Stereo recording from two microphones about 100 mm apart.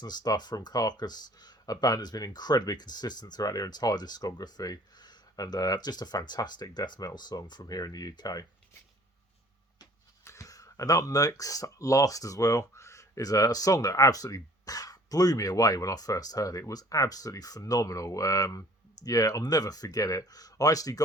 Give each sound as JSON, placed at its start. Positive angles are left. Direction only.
{"t": 0.0, "sound": "speech", "side_deg": 45}
{"t": 10.2, "sound": "speech", "side_deg": 30}